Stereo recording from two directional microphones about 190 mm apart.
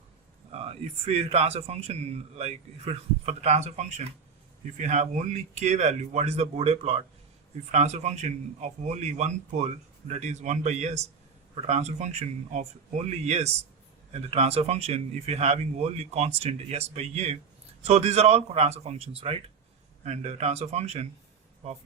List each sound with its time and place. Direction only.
0.5 s a man's voice: 30° right (ahead or behind)